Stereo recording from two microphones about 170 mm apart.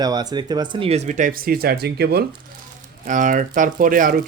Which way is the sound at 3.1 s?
50° right (ahead or behind).